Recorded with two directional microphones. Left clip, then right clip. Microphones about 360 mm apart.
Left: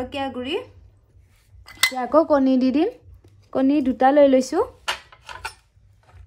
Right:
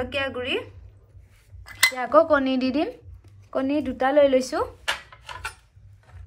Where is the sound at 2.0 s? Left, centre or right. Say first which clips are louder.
Left 1 dB; centre.